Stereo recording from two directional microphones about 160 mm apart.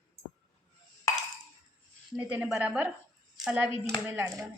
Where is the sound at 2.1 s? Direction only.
10° right (ahead or behind).